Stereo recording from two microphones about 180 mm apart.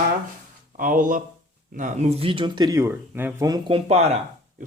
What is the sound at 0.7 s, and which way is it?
Speech, 50° right (ahead or behind).